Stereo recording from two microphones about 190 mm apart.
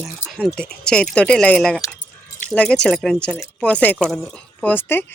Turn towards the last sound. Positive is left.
turn(degrees=10)  # may be behind; listen again after turning